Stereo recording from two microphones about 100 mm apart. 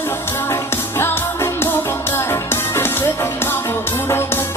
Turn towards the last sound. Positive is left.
turn(degrees=25)  # may be behind; listen again after turning